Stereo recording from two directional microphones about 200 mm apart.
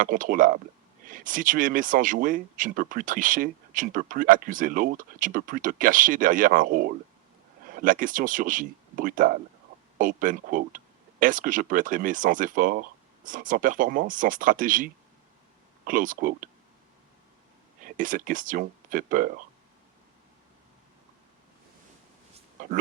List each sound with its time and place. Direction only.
0.0 s speech: 45° right (ahead or behind)
17.8 s speech: 40° right (ahead or behind)
22.6 s speech: 40° right (ahead or behind)